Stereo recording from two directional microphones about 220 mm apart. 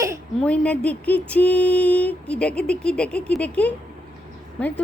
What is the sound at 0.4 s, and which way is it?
Speech, 5° left (ahead or behind).